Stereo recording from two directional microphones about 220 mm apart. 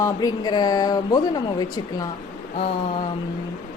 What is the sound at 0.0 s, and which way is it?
Speech, 15° left (ahead or behind).